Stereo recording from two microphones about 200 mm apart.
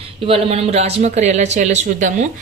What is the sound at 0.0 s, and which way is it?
Speech, 30° right (ahead or behind).